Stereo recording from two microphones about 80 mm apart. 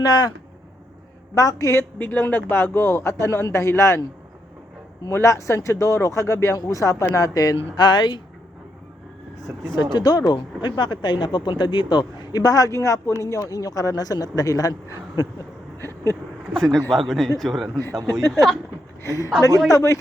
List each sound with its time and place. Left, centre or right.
0.0 s speech: left
1.4 s speech: left
1.7 s speech: left
5.0 s speech: left
7.8 s speech: left
9.7 s speech: left
15.8 s a sound: left
16.6 s speech: centre
19.0 s speech: left